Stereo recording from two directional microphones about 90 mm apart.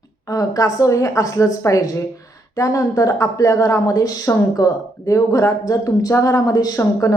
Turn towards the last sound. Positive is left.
turn(degrees=40)  # may be behind; listen again after turning